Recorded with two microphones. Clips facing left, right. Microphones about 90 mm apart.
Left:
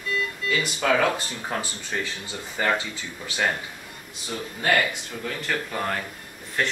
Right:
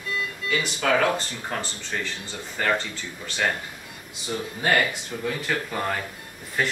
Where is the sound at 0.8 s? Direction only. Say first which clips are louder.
Even; 5° left (ahead or behind).